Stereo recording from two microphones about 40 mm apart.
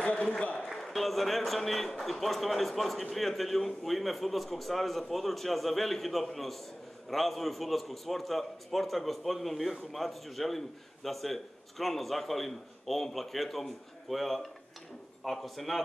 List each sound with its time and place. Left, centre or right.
0.0 s applause: left
0.7 s a man's voice: centre